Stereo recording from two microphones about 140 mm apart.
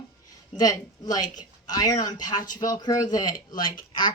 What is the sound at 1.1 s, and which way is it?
A woman's voice, 30° left (ahead or behind).